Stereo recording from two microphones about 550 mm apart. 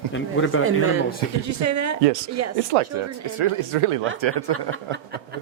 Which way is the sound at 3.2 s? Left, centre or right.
Right.